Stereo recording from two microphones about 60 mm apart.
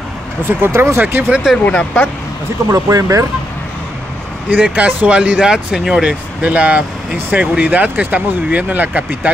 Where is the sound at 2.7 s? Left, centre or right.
Right.